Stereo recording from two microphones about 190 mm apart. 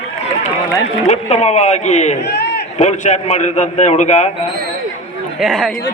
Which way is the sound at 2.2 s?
60° left (ahead or behind).